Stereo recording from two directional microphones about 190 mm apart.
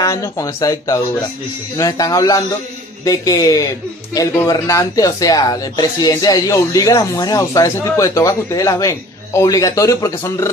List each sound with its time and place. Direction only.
0.0 s speech: 15° left (ahead or behind)